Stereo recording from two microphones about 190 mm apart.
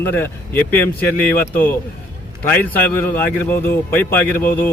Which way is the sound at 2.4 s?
10° left (ahead or behind).